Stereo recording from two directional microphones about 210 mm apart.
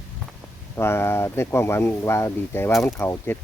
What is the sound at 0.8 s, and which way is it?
Speech, 10° left (ahead or behind).